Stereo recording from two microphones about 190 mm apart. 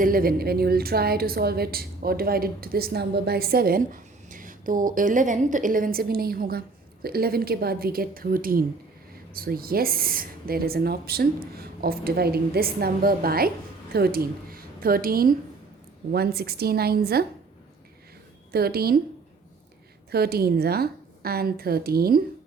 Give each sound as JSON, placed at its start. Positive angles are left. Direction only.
{"t": 0.0, "sound": "a woman's voice", "side_deg": -50}
{"t": 18.5, "sound": "a woman's voice", "side_deg": -55}
{"t": 20.1, "sound": "a woman's voice", "side_deg": -55}